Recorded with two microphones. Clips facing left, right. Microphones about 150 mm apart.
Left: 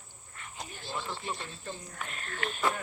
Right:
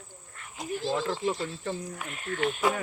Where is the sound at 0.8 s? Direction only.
90° right.